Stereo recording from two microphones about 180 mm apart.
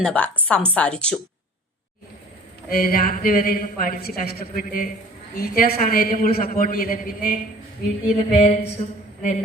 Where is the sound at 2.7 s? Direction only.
55° left (ahead or behind).